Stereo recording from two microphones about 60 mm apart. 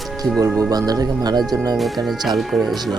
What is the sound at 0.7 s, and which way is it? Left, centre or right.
Speech, right.